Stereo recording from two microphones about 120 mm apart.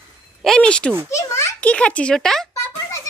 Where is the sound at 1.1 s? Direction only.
25° left (ahead or behind).